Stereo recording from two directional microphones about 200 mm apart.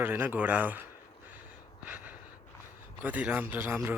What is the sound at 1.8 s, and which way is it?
Gasp, 10° right (ahead or behind).